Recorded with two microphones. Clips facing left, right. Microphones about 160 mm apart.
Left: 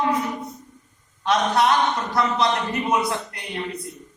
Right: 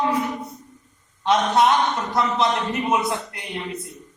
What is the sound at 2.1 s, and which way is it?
Speech, 20° right (ahead or behind).